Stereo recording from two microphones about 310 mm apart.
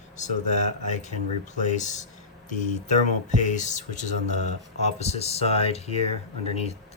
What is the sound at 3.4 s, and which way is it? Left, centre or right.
Speech, left.